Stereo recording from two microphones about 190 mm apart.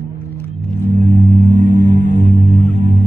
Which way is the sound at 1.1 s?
40° right (ahead or behind).